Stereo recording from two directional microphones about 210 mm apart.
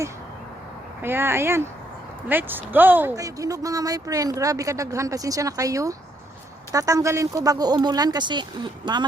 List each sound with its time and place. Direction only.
1.0 s speech: 10° right (ahead or behind)